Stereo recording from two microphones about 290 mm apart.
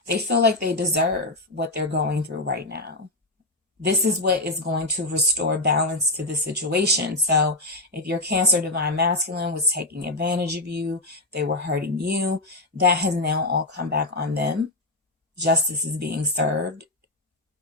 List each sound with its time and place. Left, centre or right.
0.1 s speech: right
16.0 s speech: right